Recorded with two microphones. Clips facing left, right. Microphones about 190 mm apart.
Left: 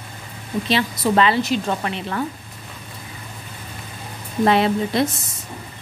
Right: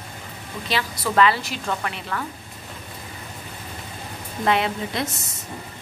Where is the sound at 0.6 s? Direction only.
25° left (ahead or behind).